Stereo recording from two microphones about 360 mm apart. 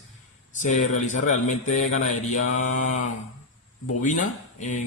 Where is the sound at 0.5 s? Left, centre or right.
Centre.